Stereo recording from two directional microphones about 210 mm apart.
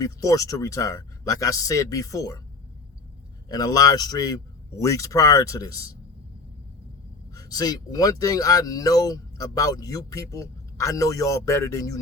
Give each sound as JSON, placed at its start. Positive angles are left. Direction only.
{"t": 0.0, "sound": "speech", "side_deg": 15}
{"t": 3.5, "sound": "speech", "side_deg": 20}
{"t": 7.3, "sound": "speech", "side_deg": 20}